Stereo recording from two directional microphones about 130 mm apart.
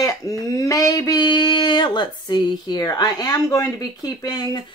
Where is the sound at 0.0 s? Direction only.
25° left (ahead or behind).